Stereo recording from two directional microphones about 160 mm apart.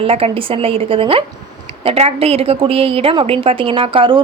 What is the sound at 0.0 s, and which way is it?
A woman's voice, 35° right (ahead or behind).